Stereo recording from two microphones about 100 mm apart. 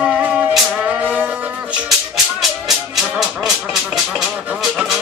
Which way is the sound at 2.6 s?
Centre (ahead or behind).